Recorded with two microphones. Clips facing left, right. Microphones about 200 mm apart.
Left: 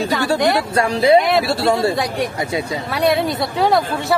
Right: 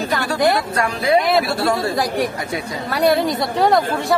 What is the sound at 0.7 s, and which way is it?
A man's voice, 30° left (ahead or behind).